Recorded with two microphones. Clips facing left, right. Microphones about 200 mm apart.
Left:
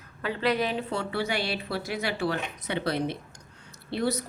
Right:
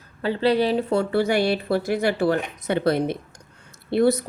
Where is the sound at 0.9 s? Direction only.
50° right (ahead or behind).